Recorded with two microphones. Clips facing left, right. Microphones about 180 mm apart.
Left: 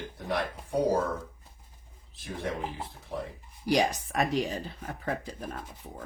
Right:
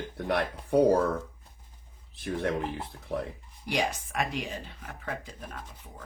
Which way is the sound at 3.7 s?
40° left (ahead or behind).